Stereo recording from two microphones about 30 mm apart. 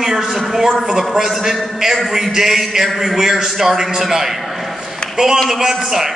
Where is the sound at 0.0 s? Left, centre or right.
Centre.